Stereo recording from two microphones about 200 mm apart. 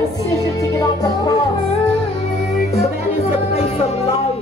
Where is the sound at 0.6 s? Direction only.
15° left (ahead or behind).